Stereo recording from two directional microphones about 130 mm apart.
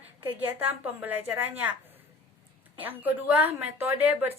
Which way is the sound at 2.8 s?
15° right (ahead or behind).